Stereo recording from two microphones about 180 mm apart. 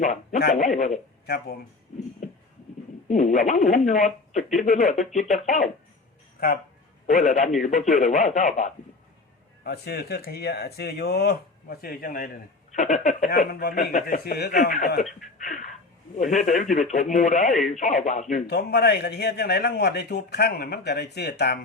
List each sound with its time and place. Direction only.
0.0 s speech: 40° left (ahead or behind)
3.1 s speech: 45° left (ahead or behind)
6.4 s a man's voice: 60° left (ahead or behind)
7.1 s speech: 40° left (ahead or behind)
9.6 s a man's voice: 65° left (ahead or behind)
12.7 s speech: 40° left (ahead or behind)
13.5 s a man's voice: 60° left (ahead or behind)
13.7 s speech: 50° left (ahead or behind)
14.5 s speech: 40° left (ahead or behind)
18.4 s a man's voice: 65° left (ahead or behind)